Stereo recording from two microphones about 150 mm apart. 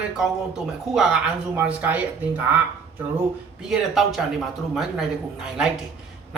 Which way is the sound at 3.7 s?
Centre (ahead or behind).